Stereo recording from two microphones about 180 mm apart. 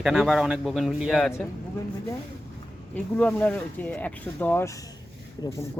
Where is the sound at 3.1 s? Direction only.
10° left (ahead or behind).